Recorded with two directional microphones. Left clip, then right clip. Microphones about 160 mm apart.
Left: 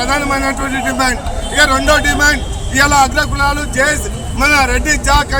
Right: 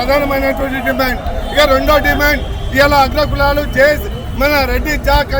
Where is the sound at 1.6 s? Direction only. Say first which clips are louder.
Even; 15° left (ahead or behind).